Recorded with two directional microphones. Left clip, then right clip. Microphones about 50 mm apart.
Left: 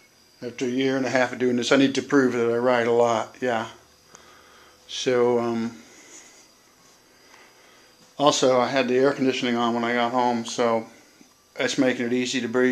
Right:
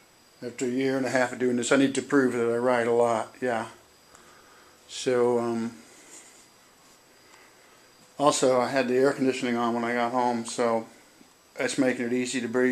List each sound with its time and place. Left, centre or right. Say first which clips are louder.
0.4 s speech: left 3 dB; right
1.3 s speech: left 3 dB; centre
4.8 s speech: left 3 dB; right
5.2 s speech: left 3 dB; centre
8.2 s speech: left 3 dB; centre
9.4 s speech: left 3 dB; centre